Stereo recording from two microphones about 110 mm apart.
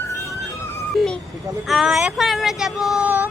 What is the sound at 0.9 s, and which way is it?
Speech, 5° left (ahead or behind).